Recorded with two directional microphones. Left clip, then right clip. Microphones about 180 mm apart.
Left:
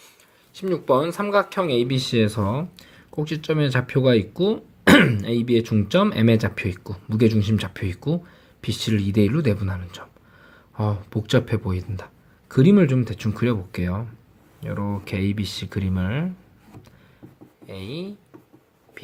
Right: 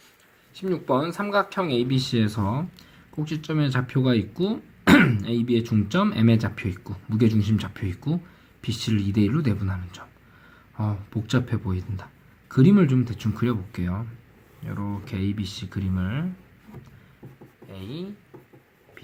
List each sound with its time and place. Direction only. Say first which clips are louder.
0.5 s speech: left 4 dB; 25° left (ahead or behind)
17.7 s speech: left 4 dB; 35° left (ahead or behind)